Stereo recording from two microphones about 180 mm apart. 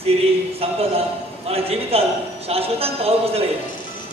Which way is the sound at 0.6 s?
35° right (ahead or behind).